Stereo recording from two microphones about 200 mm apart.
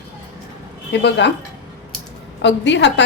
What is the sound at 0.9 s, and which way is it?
Speech, 60° left (ahead or behind).